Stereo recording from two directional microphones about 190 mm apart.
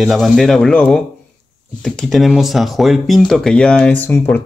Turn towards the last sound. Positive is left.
turn(degrees=10)  # may be behind; listen again after turning